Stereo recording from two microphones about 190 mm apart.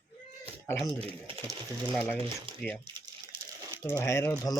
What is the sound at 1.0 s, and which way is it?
Speech, 30° right (ahead or behind).